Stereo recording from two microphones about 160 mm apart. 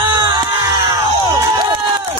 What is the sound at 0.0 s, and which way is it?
Crowd, 30° right (ahead or behind).